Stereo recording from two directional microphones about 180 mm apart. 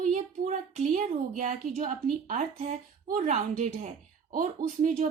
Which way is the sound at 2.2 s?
45° right (ahead or behind).